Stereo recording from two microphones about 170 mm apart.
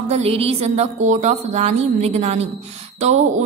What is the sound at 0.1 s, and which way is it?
A woman's voice, 35° right (ahead or behind).